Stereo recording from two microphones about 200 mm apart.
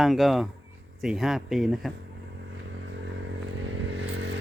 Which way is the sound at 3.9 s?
65° right (ahead or behind).